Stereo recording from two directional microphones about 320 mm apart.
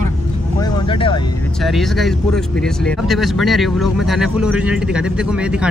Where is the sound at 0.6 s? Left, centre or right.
Centre.